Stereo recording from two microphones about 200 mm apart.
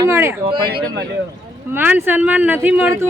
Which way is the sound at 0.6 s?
50° right (ahead or behind).